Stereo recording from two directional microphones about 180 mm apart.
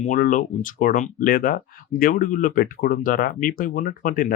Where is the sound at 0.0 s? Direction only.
50° left (ahead or behind).